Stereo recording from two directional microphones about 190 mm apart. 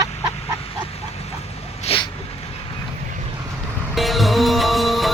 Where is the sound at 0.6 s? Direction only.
30° left (ahead or behind).